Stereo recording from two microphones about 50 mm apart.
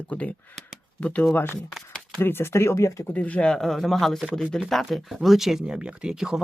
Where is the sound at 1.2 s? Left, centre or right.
Left.